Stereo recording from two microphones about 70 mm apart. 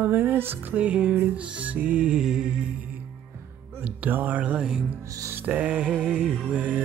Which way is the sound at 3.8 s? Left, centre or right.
Right.